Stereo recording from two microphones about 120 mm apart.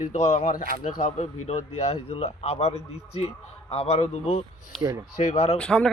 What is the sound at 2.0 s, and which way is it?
A man's voice, 60° left (ahead or behind).